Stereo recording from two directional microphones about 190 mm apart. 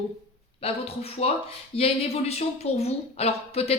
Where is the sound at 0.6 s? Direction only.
30° left (ahead or behind).